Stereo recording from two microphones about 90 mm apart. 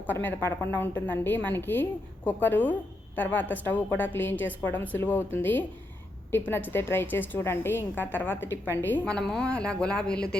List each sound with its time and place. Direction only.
0.1 s a woman's voice: 20° left (ahead or behind)
9.1 s speech: 5° left (ahead or behind)